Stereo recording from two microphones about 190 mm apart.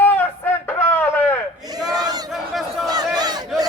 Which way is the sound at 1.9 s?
20° right (ahead or behind).